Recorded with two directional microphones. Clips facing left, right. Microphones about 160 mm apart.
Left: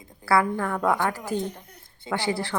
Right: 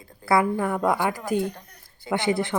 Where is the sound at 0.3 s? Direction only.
20° right (ahead or behind).